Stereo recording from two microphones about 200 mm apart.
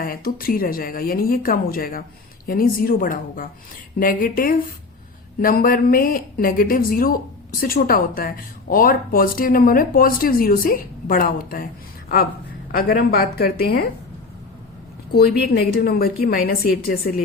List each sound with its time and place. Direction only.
0.0 s a woman's voice: 45° left (ahead or behind)
15.7 s a woman's voice: 50° left (ahead or behind)